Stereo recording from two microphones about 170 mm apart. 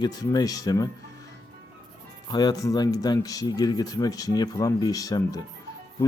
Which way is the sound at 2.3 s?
25° left (ahead or behind).